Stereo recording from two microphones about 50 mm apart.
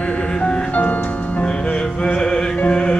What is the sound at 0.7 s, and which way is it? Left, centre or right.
Music, left.